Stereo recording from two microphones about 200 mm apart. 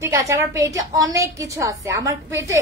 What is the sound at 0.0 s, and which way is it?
A woman's voice, 15° right (ahead or behind).